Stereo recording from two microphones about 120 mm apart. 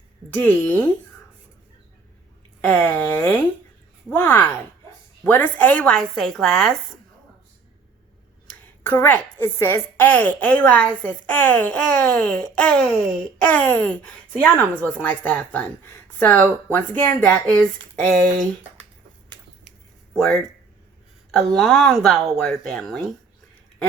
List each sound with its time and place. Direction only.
0.3 s a woman's voice: 15° left (ahead or behind)
2.6 s a woman's voice: 10° left (ahead or behind)
8.4 s a woman's voice: 15° left (ahead or behind)
20.1 s a woman's voice: 5° left (ahead or behind)